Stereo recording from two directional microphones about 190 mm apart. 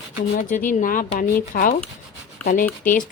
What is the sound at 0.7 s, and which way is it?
Speech, 45° left (ahead or behind).